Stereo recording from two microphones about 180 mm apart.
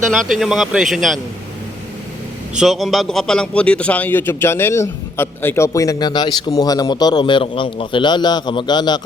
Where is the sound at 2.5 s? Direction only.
Centre (ahead or behind).